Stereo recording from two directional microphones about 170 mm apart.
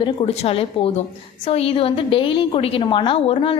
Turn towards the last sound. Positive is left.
turn(degrees=30)  # may be behind; listen again after turning